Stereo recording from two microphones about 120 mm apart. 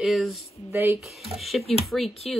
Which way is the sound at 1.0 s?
Centre (ahead or behind).